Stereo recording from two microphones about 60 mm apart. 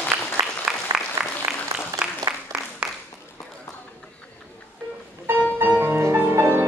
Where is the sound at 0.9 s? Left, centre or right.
Right.